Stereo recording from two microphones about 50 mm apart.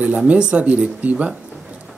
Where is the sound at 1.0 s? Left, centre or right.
Right.